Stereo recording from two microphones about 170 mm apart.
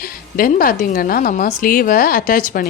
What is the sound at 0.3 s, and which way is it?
Speech, 55° left (ahead or behind).